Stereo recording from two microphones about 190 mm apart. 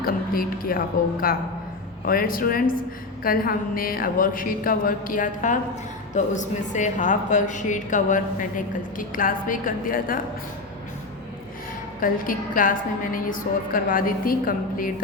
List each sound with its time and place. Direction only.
0.0 s speech: 50° left (ahead or behind)
2.0 s a woman's voice: 50° left (ahead or behind)
11.9 s a woman's voice: 45° left (ahead or behind)